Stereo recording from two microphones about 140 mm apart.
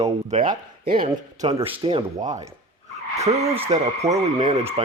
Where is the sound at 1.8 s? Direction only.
35° right (ahead or behind).